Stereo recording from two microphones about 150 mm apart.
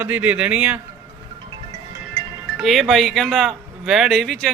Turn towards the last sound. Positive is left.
turn(degrees=5)  # may be behind; listen again after turning